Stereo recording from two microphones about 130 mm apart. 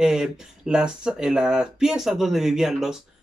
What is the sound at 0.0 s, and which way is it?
Speech, 5° right (ahead or behind).